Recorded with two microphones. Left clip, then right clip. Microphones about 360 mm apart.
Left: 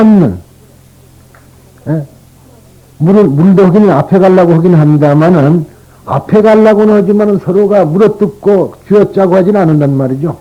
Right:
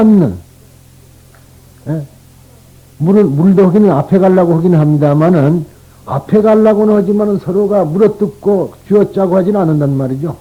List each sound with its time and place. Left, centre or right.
1.8 s a man's voice: right